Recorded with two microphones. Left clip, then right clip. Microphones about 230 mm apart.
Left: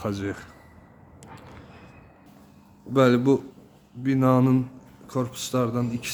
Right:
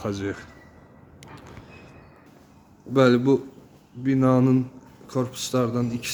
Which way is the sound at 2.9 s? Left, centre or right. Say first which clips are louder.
Right 1 dB; centre.